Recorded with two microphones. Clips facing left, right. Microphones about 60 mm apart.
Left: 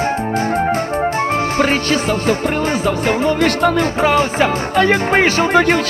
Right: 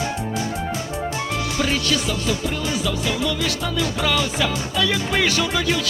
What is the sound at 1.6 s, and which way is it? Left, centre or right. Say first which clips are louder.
Music: left 4 dB; left.